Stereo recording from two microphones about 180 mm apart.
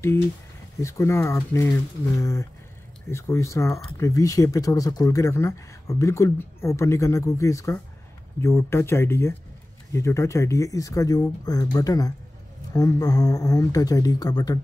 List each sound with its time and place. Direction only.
0.7 s speech: 15° left (ahead or behind)